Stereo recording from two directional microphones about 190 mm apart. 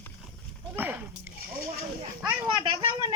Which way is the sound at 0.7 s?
10° right (ahead or behind).